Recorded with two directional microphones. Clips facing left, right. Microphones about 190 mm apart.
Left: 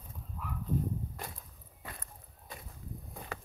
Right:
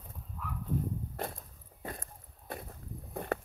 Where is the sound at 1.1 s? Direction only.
55° right (ahead or behind).